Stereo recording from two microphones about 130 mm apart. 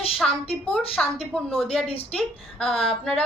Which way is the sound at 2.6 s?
45° left (ahead or behind).